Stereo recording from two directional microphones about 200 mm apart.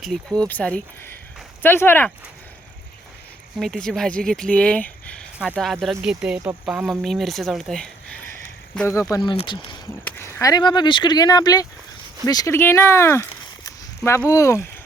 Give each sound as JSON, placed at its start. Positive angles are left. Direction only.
{"t": 0.0, "sound": "speech", "side_deg": 0}
{"t": 3.6, "sound": "speech", "side_deg": 0}
{"t": 8.9, "sound": "speech", "side_deg": 15}
{"t": 10.0, "sound": "speech", "side_deg": 10}